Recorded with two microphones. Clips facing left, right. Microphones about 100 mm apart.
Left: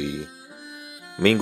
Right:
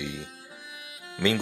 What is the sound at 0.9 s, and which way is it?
Music, 5° left (ahead or behind).